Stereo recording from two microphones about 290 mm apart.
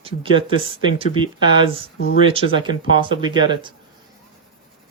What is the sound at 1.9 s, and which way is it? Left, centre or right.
Speech, left.